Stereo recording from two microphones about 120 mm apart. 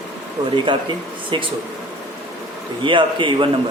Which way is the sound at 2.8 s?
45° right (ahead or behind).